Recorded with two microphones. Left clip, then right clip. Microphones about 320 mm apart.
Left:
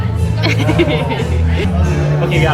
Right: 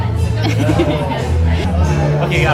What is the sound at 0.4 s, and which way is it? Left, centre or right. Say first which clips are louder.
Speech: left 2 dB; centre.